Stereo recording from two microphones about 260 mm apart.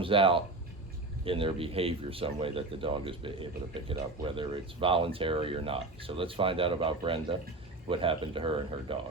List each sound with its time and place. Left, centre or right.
0.0 s speech: centre